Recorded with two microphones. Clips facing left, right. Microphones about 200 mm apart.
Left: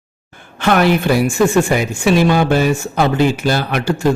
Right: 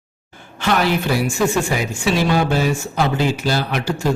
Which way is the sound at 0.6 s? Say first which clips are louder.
Left 5 dB; 55° left (ahead or behind).